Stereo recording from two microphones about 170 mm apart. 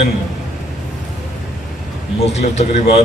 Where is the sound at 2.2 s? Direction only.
40° left (ahead or behind).